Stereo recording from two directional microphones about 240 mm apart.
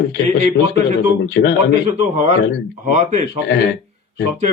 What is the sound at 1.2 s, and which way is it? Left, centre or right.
Speech, left.